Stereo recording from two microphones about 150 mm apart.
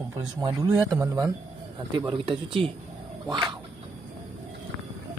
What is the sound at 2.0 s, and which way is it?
Speech, 35° right (ahead or behind).